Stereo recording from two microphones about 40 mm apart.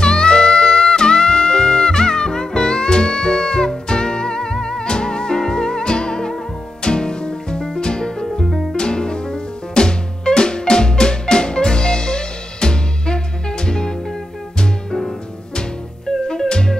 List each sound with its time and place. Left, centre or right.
0.0 s music: left
8.3 s music: centre
8.7 s music: left
16.1 s music: centre